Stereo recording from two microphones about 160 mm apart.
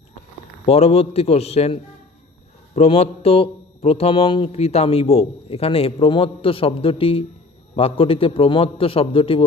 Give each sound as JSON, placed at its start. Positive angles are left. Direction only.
{"t": 0.6, "sound": "a man's voice", "side_deg": 40}